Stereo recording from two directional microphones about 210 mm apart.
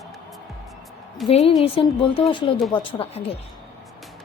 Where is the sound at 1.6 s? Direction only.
25° left (ahead or behind).